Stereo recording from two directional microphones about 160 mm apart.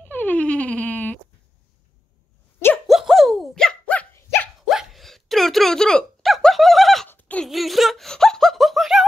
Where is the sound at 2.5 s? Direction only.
15° left (ahead or behind).